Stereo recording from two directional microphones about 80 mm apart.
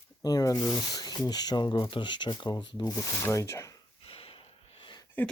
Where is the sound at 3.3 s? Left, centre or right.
Left.